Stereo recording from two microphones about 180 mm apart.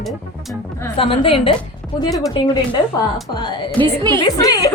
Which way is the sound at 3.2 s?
25° left (ahead or behind).